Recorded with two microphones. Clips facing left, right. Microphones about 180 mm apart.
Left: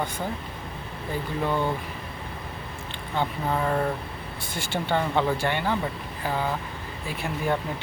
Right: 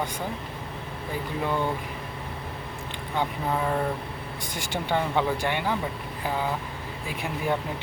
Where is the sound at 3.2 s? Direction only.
5° right (ahead or behind).